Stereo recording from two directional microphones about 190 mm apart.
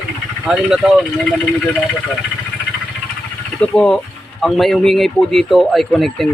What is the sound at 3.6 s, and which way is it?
Speech, 5° left (ahead or behind).